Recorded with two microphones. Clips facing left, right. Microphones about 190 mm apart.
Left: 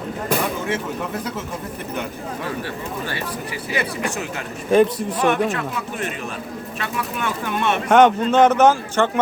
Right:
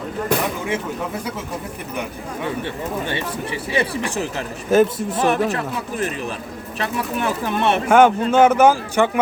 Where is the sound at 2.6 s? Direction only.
25° right (ahead or behind).